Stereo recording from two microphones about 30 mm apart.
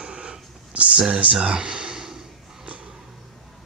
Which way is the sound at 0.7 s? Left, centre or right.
Right.